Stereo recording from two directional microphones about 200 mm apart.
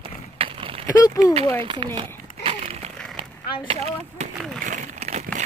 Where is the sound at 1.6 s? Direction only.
25° right (ahead or behind).